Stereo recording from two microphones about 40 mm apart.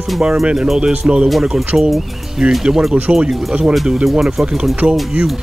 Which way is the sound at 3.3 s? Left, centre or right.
Centre.